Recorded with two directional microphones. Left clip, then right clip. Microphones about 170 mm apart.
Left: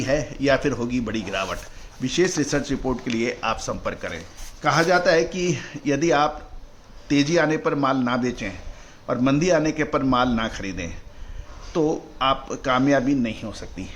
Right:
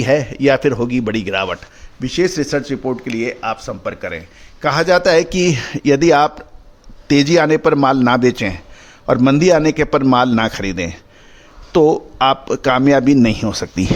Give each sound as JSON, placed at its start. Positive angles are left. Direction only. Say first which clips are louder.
{"t": 0.0, "sound": "speech", "louder": "right 9 dB", "side_deg": -65}
{"t": 2.0, "sound": "speech", "louder": "right 5 dB", "side_deg": -35}
{"t": 4.6, "sound": "speech", "louder": "right 6 dB", "side_deg": -60}